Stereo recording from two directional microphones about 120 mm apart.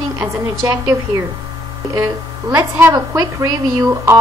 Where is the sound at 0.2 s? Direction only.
25° right (ahead or behind).